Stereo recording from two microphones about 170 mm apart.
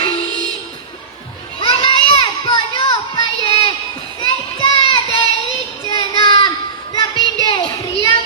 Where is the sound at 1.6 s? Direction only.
30° left (ahead or behind).